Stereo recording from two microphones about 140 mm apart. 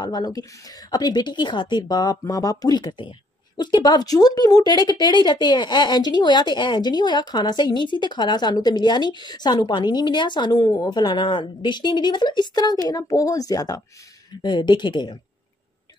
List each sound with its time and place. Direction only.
0.0 s a woman's voice: 30° left (ahead or behind)